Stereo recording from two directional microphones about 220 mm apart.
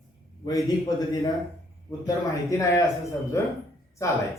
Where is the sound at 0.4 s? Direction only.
15° left (ahead or behind).